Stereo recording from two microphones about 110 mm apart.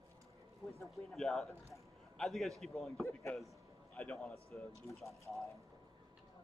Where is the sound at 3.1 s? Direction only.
20° left (ahead or behind).